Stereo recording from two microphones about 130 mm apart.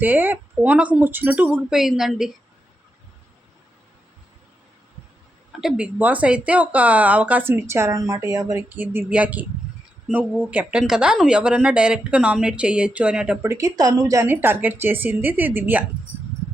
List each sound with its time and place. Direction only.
0.0 s speech: 15° right (ahead or behind)
5.5 s speech: 5° right (ahead or behind); by 8.6 s 25° right (ahead or behind)
8.7 s speech: 15° right (ahead or behind)
13.4 s speech: 20° right (ahead or behind)